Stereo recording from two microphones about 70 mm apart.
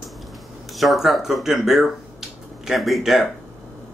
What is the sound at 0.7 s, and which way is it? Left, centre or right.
Speech, centre.